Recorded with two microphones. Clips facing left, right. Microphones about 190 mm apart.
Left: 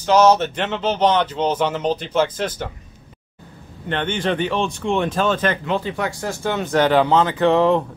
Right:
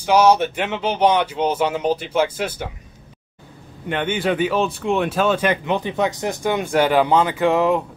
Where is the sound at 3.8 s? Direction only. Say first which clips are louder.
Right 1 dB; 10° right (ahead or behind).